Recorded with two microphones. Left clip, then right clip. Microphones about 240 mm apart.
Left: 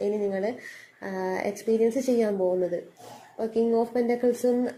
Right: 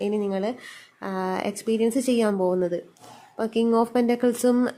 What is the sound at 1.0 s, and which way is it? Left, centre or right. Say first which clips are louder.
Speech: right 2 dB; right.